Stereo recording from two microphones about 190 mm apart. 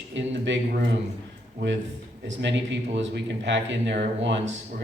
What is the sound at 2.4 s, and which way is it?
Speech, 70° right (ahead or behind).